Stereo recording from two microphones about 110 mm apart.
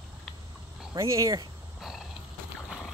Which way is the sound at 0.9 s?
30° right (ahead or behind).